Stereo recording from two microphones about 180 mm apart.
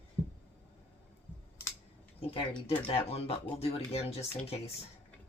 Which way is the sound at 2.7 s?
30° left (ahead or behind).